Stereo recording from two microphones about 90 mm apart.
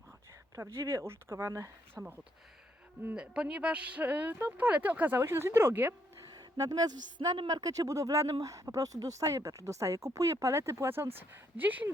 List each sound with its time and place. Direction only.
0.6 s speech: 30° right (ahead or behind)
3.2 s speech: 10° right (ahead or behind)
6.6 s speech: 45° right (ahead or behind); by 11.9 s 20° right (ahead or behind)